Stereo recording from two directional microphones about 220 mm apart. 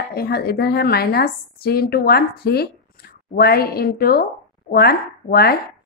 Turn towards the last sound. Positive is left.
turn(degrees=45)  # may be behind; listen again after turning